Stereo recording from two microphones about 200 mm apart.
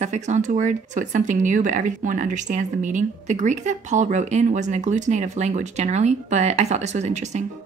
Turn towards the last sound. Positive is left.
turn(degrees=-35)  # may be behind; listen again after turning